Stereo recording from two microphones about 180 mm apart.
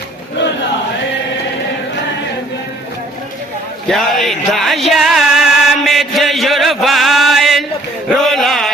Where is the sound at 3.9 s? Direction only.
Centre (ahead or behind).